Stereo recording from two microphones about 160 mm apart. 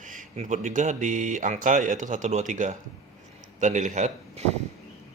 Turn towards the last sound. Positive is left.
turn(degrees=-45)  # may be behind; listen again after turning